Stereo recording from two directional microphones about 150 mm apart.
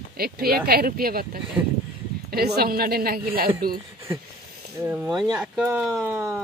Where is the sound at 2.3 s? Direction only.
90° right.